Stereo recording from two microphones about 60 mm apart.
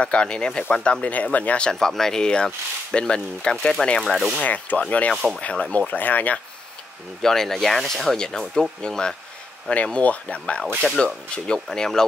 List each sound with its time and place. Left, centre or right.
0.0 s speech: centre
1.7 s speech: centre
4.0 s speech: centre
4.4 s speech: left
7.2 s speech: centre
10.8 s speech: centre